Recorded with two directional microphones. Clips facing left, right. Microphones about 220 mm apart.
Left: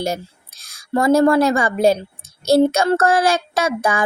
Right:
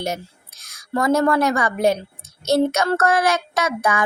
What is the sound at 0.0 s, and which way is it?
A woman's voice, 30° left (ahead or behind).